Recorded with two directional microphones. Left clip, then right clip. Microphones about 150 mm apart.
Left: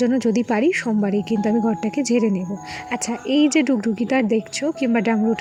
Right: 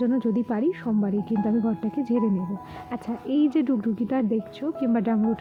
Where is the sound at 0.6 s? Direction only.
20° left (ahead or behind).